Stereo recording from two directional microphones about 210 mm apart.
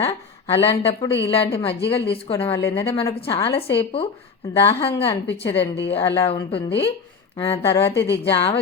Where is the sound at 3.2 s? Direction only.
25° left (ahead or behind).